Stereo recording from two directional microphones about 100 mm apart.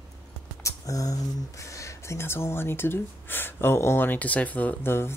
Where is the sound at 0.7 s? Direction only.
35° left (ahead or behind).